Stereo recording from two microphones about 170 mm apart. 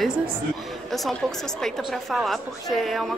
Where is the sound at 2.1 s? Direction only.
Centre (ahead or behind).